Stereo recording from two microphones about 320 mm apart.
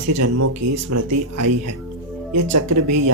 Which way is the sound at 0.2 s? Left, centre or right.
Right.